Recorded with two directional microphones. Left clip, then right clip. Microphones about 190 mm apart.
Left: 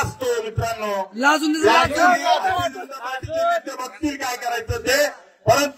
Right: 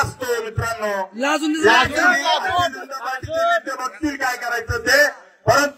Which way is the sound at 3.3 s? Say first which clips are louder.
Right 2 dB; 20° right (ahead or behind).